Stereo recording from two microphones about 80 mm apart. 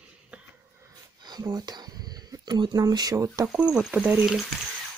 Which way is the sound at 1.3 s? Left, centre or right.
Right.